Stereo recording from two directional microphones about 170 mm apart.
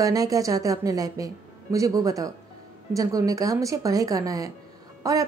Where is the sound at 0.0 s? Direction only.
20° right (ahead or behind).